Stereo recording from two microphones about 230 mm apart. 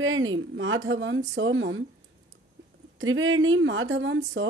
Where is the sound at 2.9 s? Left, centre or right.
Right.